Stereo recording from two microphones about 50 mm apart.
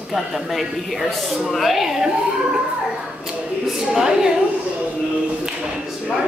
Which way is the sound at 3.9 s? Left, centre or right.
Centre.